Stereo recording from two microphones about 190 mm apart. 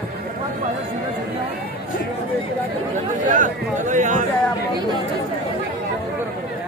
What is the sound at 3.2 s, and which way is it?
Speech, 40° right (ahead or behind).